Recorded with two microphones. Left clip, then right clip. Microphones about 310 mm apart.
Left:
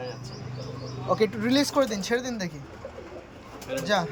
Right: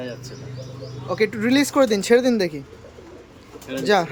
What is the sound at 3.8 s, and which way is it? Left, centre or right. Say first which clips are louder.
Speech: right 7 dB; centre.